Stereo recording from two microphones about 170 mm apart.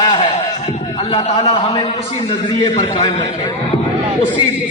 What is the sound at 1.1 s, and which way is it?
A man's voice, 35° left (ahead or behind).